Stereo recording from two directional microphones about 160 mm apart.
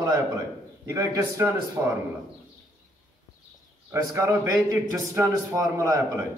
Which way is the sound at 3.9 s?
15° right (ahead or behind).